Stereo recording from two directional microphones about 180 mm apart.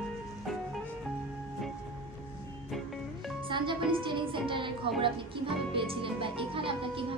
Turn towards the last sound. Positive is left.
turn(degrees=-30)  # may be behind; listen again after turning